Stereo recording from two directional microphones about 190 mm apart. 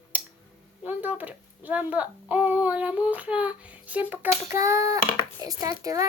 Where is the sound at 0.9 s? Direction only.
10° right (ahead or behind).